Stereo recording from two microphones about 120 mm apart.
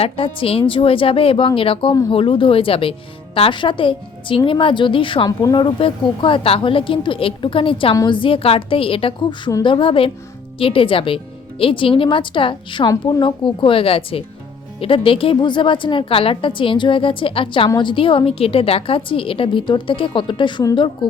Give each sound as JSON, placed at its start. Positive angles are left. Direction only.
{"t": 0.0, "sound": "a woman's voice", "side_deg": 50}